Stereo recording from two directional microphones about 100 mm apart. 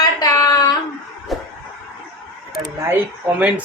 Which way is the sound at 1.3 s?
Centre (ahead or behind).